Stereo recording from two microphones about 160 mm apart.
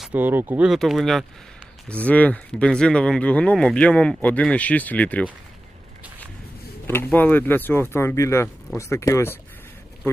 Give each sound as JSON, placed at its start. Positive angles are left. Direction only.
{"t": 0.0, "sound": "speech", "side_deg": -10}
{"t": 6.8, "sound": "speech", "side_deg": 15}